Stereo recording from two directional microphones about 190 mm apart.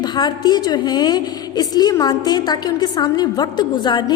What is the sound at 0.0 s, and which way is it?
A woman's voice, 20° left (ahead or behind).